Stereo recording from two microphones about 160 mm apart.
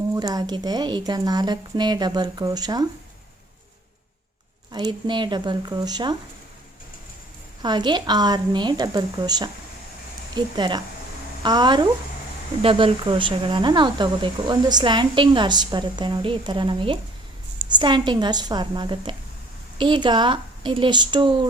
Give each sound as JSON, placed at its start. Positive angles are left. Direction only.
{"t": 0.1, "sound": "speech", "side_deg": -25}
{"t": 4.7, "sound": "speech", "side_deg": -30}
{"t": 7.6, "sound": "speech", "side_deg": -25}